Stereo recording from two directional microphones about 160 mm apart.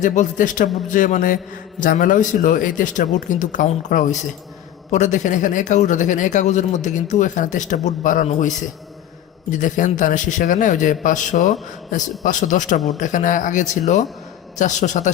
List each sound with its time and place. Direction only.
0.0 s speech: 50° left (ahead or behind)